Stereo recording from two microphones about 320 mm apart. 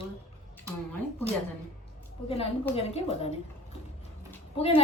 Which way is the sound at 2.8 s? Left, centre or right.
Centre.